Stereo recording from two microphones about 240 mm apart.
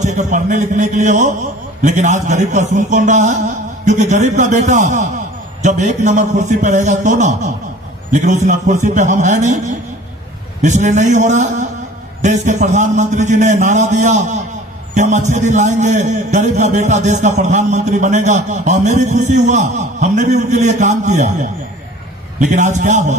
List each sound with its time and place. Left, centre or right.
0.0 s a man's voice: right